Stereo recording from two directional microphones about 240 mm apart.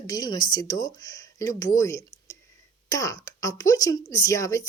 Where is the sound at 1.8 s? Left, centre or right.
Centre.